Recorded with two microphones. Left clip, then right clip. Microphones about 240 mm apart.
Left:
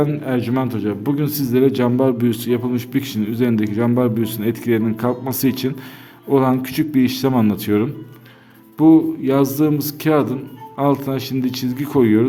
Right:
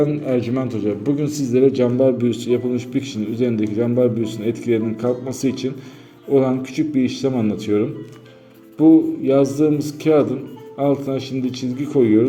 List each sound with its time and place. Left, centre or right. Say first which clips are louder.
0.0 s a man's voice: right 1 dB; left
9.2 s a man's voice: right 1 dB; left